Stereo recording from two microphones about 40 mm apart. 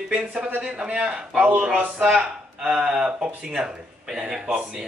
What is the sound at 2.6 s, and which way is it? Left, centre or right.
Speech, centre.